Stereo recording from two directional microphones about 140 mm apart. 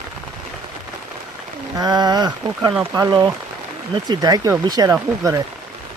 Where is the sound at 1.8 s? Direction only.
25° right (ahead or behind).